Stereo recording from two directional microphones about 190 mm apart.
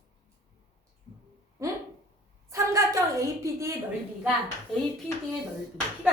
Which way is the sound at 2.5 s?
15° right (ahead or behind).